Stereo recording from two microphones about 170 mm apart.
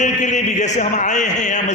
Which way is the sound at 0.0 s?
45° left (ahead or behind).